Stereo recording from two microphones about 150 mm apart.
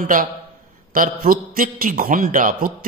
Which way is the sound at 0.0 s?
65° right (ahead or behind).